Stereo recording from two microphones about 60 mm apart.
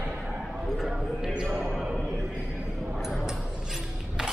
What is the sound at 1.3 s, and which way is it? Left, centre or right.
Speech, centre.